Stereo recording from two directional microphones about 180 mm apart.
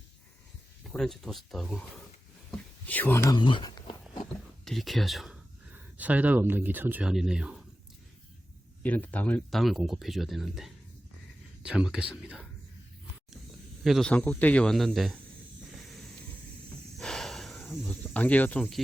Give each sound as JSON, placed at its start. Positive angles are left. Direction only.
{"t": 0.9, "sound": "speech", "side_deg": 0}
{"t": 2.8, "sound": "speech", "side_deg": 10}
{"t": 3.3, "sound": "speech", "side_deg": 25}
{"t": 4.6, "sound": "speech", "side_deg": 0}
{"t": 8.8, "sound": "speech", "side_deg": 10}
{"t": 13.8, "sound": "speech", "side_deg": 0}
{"t": 15.7, "sound": "a sound", "side_deg": 0}
{"t": 17.0, "sound": "a sound", "side_deg": 5}